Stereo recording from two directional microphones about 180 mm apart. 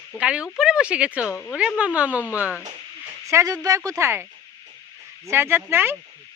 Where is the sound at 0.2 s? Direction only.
5° right (ahead or behind).